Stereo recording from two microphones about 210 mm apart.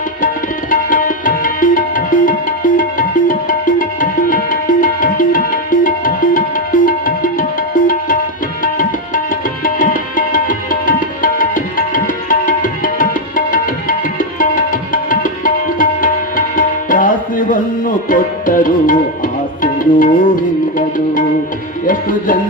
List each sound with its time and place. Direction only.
0.7 s tabla: 40° left (ahead or behind)
2.7 s music: 40° left (ahead or behind)
8.6 s tabla: 40° left (ahead or behind)
19.8 s music: 40° left (ahead or behind)